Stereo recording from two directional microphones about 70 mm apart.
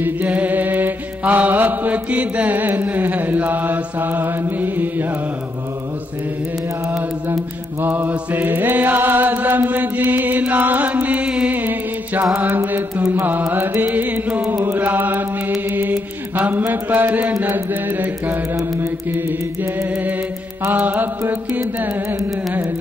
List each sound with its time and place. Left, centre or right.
0.0 s mantra: right
6.9 s mantra: right
7.8 s chant: right
12.4 s mantra: right
13.1 s chant: right
13.8 s music: right
14.6 s chant: right
15.6 s mantra: right
18.8 s chant: right
19.9 s music: right
20.6 s chant: right